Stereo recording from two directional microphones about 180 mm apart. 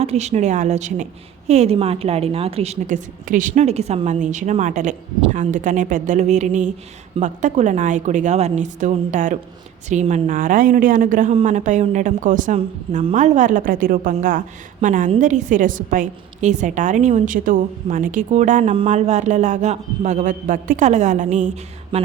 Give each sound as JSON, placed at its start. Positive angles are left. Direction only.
{"t": 0.0, "sound": "a woman's voice", "side_deg": -35}